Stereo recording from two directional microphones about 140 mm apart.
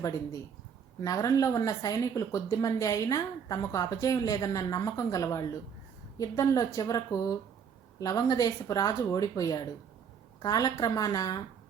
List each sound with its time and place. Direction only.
1.0 s speech: 25° left (ahead or behind)